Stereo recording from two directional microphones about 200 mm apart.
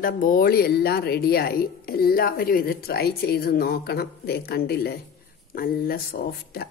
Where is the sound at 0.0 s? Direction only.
45° left (ahead or behind).